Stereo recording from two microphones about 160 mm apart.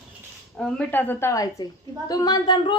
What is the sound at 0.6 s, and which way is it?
A woman's voice, 5° left (ahead or behind).